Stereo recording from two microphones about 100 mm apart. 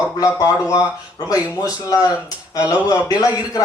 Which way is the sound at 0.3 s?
35° left (ahead or behind).